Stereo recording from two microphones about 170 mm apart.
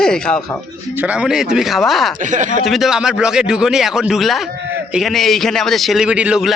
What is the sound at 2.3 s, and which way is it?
Speech, 45° right (ahead or behind).